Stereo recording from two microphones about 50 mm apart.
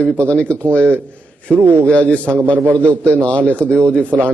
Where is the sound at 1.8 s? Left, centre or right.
Left.